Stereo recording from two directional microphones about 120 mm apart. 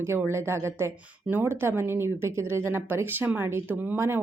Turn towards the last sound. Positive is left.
turn(degrees=-20)  # may be behind; listen again after turning